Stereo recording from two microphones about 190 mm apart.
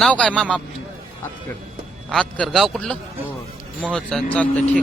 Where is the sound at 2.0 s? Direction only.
Centre (ahead or behind).